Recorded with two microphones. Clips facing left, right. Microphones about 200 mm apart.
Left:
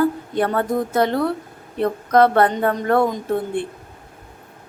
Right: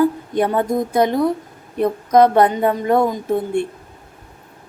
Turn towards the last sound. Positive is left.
turn(degrees=-10)  # may be behind; listen again after turning